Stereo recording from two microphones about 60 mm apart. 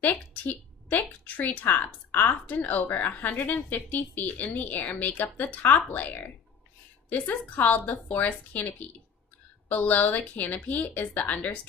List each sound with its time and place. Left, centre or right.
0.0 s a woman's voice: left